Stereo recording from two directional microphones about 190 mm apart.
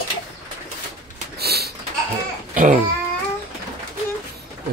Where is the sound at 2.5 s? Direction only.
45° right (ahead or behind).